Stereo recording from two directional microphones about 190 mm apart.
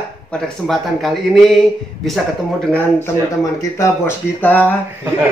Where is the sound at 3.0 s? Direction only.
15° left (ahead or behind).